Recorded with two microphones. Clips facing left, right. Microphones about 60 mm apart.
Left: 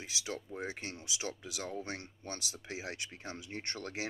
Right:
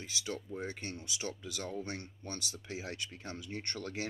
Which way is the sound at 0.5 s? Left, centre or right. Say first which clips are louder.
Even; centre.